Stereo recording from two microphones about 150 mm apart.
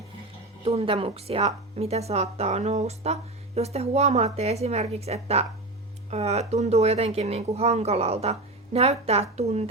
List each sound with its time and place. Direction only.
0.6 s a woman's voice: 40° right (ahead or behind)